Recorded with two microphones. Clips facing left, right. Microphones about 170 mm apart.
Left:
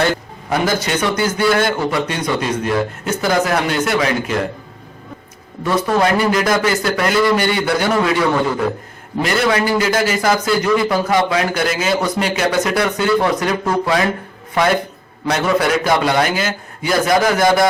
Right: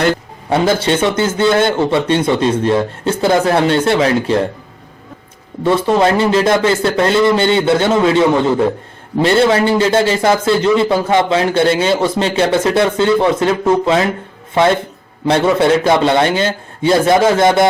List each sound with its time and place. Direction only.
0.1 s a man's voice: 25° right (ahead or behind)
5.6 s a man's voice: 25° right (ahead or behind)